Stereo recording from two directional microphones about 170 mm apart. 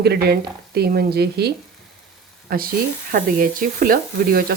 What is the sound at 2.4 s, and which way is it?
Speech, 60° right (ahead or behind).